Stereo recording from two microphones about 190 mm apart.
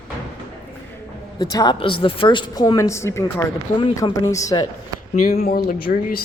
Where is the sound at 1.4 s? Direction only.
20° left (ahead or behind).